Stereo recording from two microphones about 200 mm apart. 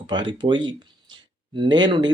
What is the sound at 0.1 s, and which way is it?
Speech, 25° right (ahead or behind).